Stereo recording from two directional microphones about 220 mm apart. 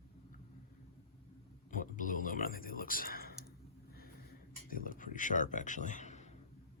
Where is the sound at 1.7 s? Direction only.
35° left (ahead or behind).